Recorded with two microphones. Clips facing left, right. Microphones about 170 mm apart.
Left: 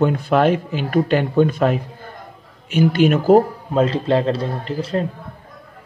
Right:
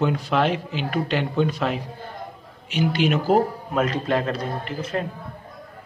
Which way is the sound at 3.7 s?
30° left (ahead or behind).